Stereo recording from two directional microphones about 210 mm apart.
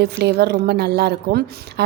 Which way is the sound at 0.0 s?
50° right (ahead or behind).